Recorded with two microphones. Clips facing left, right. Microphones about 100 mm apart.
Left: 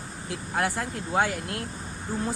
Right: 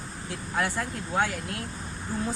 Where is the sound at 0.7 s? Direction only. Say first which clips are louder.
Left 1 dB; 60° left (ahead or behind).